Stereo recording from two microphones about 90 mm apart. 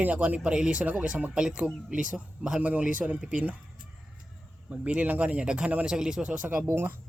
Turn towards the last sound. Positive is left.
turn(degrees=-15)  # may be behind; listen again after turning